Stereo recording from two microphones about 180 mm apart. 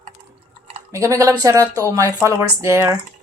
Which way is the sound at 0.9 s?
15° right (ahead or behind).